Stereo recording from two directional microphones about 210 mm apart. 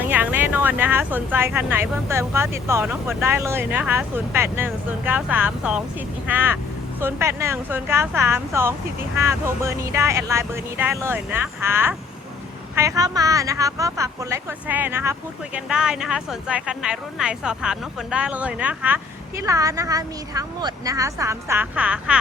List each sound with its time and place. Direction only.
0.0 s speech: 10° right (ahead or behind)